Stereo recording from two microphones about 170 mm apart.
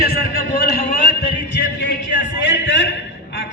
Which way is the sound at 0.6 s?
60° left (ahead or behind).